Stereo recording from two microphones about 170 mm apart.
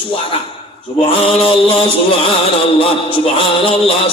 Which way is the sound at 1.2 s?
30° left (ahead or behind).